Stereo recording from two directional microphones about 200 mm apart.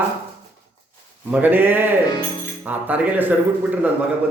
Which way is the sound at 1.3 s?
10° right (ahead or behind).